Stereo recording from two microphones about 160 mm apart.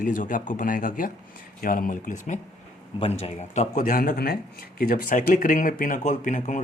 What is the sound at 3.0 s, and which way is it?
Speech, 40° left (ahead or behind).